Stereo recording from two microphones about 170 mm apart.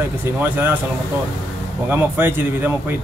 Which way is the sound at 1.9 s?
10° right (ahead or behind).